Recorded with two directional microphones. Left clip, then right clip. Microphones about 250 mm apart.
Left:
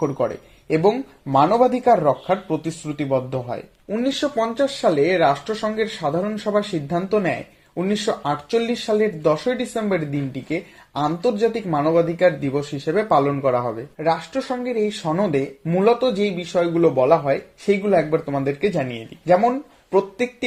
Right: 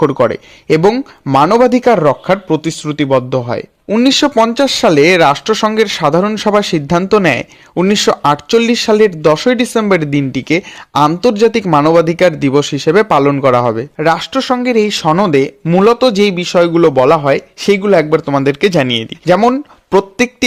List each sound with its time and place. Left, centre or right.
0.0 s speech: right